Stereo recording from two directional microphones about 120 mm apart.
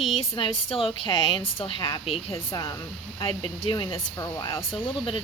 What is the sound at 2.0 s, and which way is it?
A woman's voice, 50° left (ahead or behind).